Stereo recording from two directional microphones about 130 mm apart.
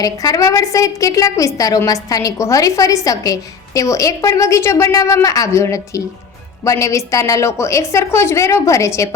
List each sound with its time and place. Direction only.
0.0 s a woman's voice: 25° left (ahead or behind)